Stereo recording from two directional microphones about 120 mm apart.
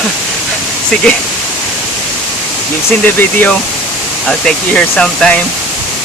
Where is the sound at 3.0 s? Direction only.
15° left (ahead or behind).